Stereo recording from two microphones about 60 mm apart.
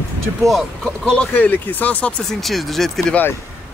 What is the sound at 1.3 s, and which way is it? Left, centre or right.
Speech, left.